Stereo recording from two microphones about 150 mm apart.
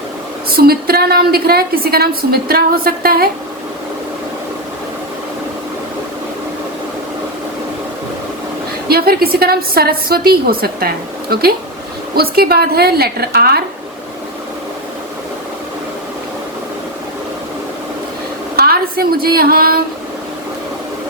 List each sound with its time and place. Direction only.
0.5 s a woman's voice: 90° right
8.9 s a woman's voice: 90° right
18.5 s a woman's voice: 90° right